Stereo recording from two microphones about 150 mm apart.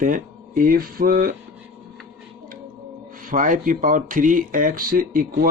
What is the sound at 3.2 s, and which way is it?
Speech, 60° right (ahead or behind).